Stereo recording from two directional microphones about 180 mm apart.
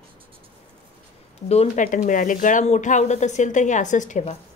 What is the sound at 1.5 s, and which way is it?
Speech, 35° left (ahead or behind).